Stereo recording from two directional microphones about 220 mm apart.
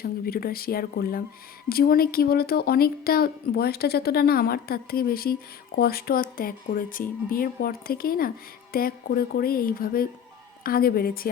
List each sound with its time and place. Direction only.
0.0 s speech: 45° left (ahead or behind)